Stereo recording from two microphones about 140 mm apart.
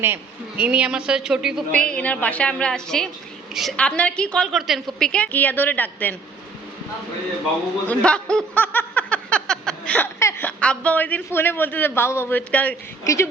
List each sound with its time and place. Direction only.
0.0 s a man's voice: 15° right (ahead or behind)
1.7 s a woman's voice: 10° left (ahead or behind)
7.9 s a sound: 5° left (ahead or behind)
10.6 s a woman's voice: 10° left (ahead or behind)